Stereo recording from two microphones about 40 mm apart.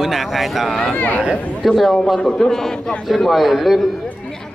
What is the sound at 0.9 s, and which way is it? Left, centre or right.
Speech, left.